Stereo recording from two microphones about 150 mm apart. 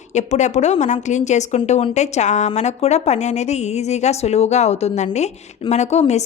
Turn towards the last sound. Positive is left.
turn(degrees=45)  # may be behind; listen again after turning